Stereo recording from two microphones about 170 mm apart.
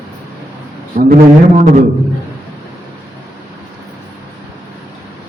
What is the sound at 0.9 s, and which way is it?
Speech, 55° right (ahead or behind).